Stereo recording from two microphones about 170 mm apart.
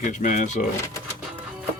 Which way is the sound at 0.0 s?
50° left (ahead or behind).